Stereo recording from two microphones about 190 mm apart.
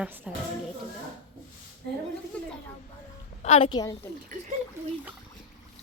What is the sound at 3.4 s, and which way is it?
Speech, 35° left (ahead or behind).